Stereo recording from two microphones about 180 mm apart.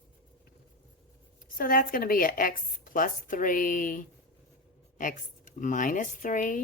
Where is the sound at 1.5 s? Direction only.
50° left (ahead or behind).